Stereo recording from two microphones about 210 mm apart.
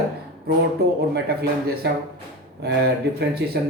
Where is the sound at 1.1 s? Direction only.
50° right (ahead or behind).